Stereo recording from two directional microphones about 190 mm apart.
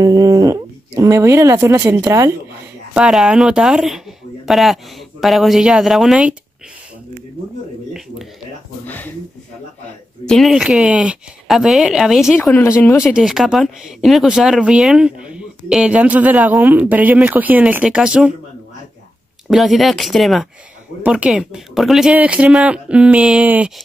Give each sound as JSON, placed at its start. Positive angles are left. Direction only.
{"t": 0.0, "sound": "speech", "side_deg": -20}
{"t": 2.9, "sound": "speech", "side_deg": -5}
{"t": 8.8, "sound": "a sound", "side_deg": 10}
{"t": 10.2, "sound": "speech", "side_deg": 0}
{"t": 12.4, "sound": "speech", "side_deg": 10}
{"t": 13.0, "sound": "speech", "side_deg": -5}
{"t": 19.5, "sound": "speech", "side_deg": 0}